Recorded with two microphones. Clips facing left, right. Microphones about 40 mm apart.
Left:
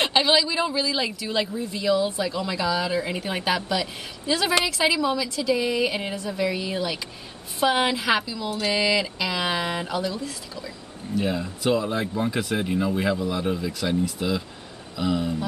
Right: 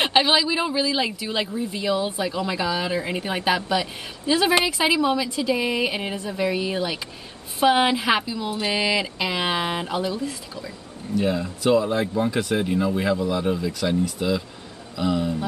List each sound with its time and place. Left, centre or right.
0.0 s speech: centre